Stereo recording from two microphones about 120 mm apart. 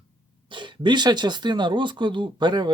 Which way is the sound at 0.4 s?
40° right (ahead or behind).